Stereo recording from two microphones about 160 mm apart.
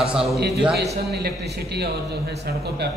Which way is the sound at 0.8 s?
90° right.